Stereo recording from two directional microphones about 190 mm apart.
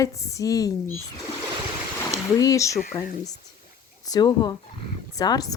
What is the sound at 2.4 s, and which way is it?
Speech, 15° left (ahead or behind).